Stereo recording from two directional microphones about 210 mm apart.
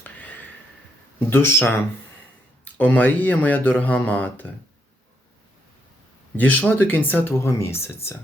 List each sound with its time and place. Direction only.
0.0 s a sound: 10° left (ahead or behind)
1.3 s speech: 10° left (ahead or behind)
6.3 s speech: 10° left (ahead or behind)